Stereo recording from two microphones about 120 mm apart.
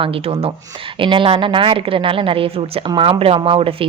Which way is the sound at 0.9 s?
45° right (ahead or behind).